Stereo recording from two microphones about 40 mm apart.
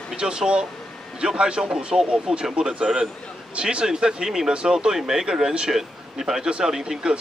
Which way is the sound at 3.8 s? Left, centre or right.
Centre.